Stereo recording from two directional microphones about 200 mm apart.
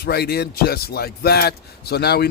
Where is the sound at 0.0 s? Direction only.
50° left (ahead or behind).